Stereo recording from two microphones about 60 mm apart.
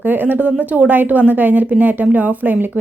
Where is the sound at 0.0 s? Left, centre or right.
Right.